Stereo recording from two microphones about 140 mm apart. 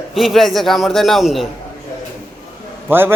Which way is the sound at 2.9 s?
15° right (ahead or behind).